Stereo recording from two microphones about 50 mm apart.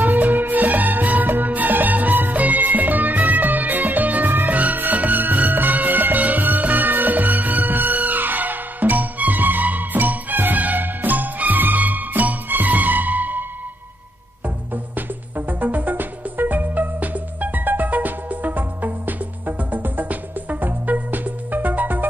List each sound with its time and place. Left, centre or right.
0.0 s music: right
14.7 s music: right